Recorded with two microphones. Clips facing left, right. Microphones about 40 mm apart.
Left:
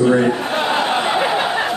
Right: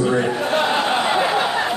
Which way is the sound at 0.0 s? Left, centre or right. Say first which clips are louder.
Left 4 dB; centre.